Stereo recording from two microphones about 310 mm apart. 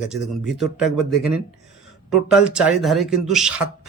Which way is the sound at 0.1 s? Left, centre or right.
Centre.